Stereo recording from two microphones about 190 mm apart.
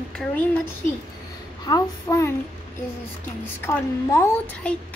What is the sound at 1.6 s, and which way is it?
Speech, 20° left (ahead or behind).